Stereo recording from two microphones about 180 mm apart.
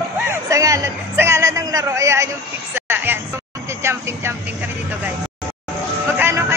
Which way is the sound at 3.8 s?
15° right (ahead or behind).